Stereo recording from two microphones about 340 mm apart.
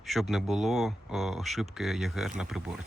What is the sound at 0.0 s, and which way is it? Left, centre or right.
Speech, centre.